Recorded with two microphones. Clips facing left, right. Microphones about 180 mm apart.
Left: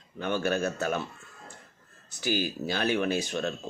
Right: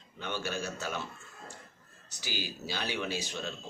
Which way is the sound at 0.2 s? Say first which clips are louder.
Left 8 dB; 50° left (ahead or behind).